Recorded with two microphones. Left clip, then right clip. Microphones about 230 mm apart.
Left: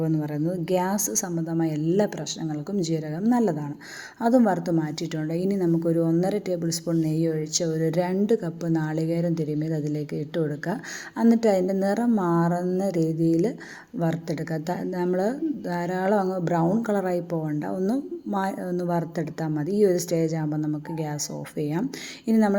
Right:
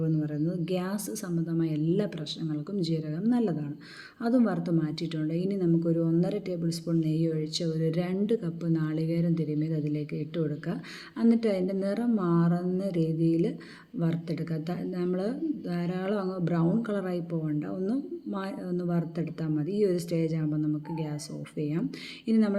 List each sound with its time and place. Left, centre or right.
0.0 s a woman's voice: centre